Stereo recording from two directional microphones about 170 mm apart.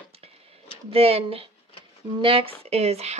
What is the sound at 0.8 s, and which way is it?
Speech, 35° right (ahead or behind).